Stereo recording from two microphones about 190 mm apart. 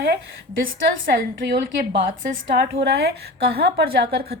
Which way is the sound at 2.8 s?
60° right (ahead or behind).